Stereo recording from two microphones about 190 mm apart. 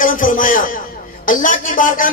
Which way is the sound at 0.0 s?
45° left (ahead or behind).